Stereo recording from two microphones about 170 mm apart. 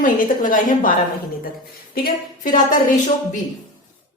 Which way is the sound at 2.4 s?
50° left (ahead or behind).